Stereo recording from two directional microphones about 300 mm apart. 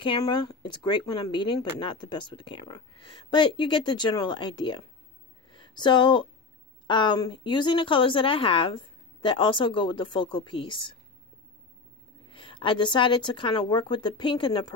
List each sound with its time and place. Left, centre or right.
0.0 s speech: centre
12.3 s speech: centre